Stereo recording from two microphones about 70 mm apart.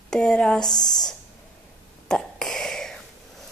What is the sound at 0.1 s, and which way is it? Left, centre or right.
Speech, centre.